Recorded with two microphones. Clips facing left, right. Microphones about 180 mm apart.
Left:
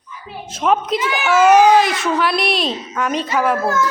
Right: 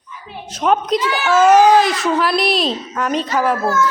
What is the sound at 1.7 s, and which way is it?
Speech, centre (ahead or behind).